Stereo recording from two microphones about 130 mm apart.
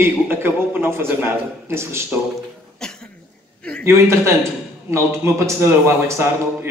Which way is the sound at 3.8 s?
20° right (ahead or behind).